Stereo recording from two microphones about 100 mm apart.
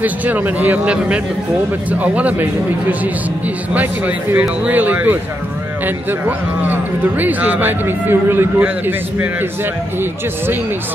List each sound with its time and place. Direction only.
0.0 s a man's voice: 15° right (ahead or behind)